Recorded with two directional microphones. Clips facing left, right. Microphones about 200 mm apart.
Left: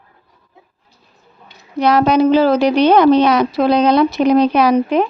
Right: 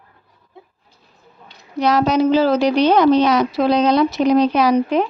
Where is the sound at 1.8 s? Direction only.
60° left (ahead or behind).